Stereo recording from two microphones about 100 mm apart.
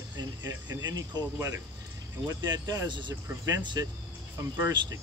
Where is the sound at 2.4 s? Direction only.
40° right (ahead or behind).